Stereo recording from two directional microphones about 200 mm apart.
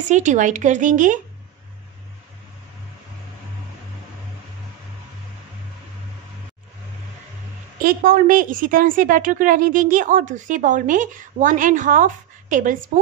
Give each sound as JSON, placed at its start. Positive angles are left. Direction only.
{"t": 0.0, "sound": "a woman's voice", "side_deg": -40}
{"t": 7.8, "sound": "a woman's voice", "side_deg": -45}